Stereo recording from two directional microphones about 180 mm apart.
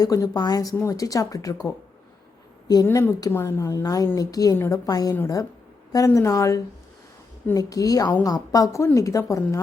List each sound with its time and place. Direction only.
0.0 s a woman's voice: 20° left (ahead or behind)
2.6 s a woman's voice: 20° left (ahead or behind)